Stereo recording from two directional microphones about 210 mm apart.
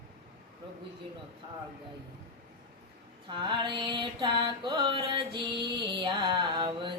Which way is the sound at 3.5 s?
20° right (ahead or behind).